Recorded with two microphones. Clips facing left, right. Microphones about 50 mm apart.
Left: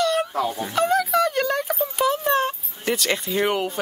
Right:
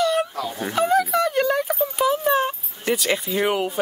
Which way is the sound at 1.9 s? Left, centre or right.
Centre.